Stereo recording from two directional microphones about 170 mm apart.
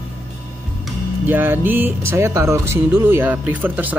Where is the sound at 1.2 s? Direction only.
10° right (ahead or behind).